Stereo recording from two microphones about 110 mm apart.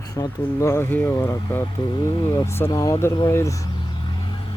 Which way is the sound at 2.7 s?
30° left (ahead or behind).